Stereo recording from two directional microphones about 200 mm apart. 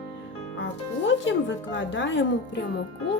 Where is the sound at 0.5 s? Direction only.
65° left (ahead or behind).